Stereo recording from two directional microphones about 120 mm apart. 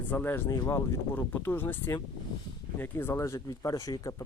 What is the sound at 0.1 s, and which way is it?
Speech, 15° left (ahead or behind).